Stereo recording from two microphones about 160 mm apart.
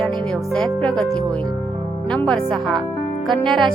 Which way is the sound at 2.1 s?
5° left (ahead or behind).